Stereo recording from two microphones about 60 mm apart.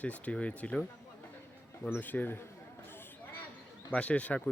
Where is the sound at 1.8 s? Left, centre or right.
Left.